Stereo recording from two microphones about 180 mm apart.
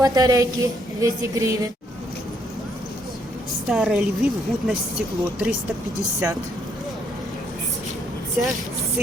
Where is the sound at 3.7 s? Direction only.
5° right (ahead or behind).